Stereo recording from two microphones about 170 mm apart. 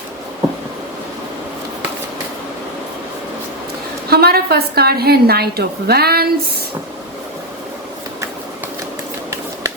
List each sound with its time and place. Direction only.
4.1 s a woman's voice: 65° right (ahead or behind)